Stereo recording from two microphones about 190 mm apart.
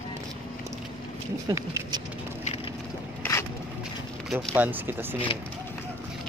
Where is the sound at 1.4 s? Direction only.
20° right (ahead or behind).